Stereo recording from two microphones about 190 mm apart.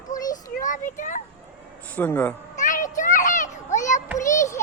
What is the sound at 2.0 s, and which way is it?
Speech, 10° left (ahead or behind).